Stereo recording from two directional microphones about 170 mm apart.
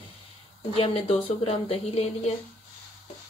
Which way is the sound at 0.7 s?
35° left (ahead or behind).